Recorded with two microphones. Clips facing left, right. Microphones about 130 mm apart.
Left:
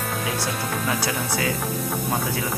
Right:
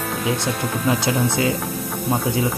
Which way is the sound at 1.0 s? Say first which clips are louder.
Right 5 dB; 20° right (ahead or behind).